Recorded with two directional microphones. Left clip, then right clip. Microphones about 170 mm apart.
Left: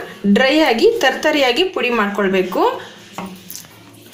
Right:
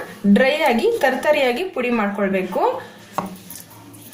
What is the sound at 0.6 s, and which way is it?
A woman's voice, 40° left (ahead or behind).